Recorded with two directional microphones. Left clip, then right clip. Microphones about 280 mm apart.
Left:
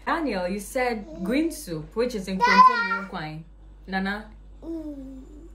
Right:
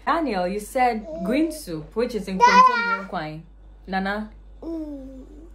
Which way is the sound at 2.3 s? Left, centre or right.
Right.